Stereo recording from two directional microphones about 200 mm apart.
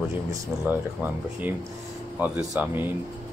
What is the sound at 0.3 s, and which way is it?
Speech, 10° right (ahead or behind).